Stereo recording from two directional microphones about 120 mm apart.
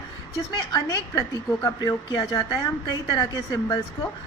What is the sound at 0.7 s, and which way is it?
A woman's voice, 35° left (ahead or behind).